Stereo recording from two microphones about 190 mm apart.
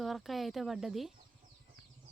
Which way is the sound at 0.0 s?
Centre (ahead or behind).